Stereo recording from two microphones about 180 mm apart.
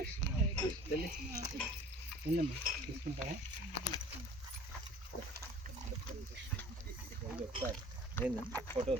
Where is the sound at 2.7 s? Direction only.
50° right (ahead or behind).